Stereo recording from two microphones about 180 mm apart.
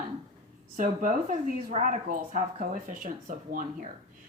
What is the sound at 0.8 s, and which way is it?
Speech, 45° right (ahead or behind).